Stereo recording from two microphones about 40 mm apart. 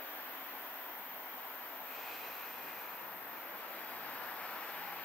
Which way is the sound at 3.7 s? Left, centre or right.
Left.